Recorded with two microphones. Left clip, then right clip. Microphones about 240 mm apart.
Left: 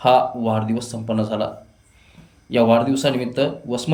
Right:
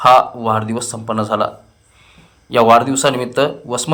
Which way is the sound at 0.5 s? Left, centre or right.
Centre.